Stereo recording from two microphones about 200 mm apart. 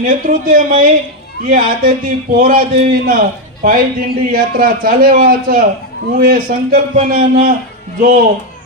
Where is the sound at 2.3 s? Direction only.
45° right (ahead or behind).